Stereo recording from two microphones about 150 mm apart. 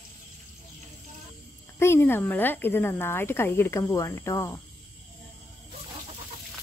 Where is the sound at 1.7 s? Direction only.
15° left (ahead or behind).